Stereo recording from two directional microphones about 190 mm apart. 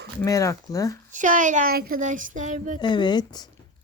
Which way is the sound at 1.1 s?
40° right (ahead or behind).